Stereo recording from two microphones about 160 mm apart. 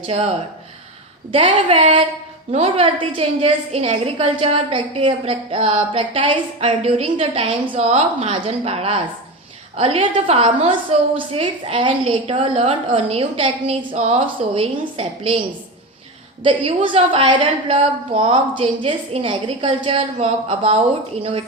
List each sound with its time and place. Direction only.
0.1 s a woman's voice: 40° right (ahead or behind)
1.3 s a woman's voice: 35° right (ahead or behind)
16.4 s a woman's voice: 30° right (ahead or behind)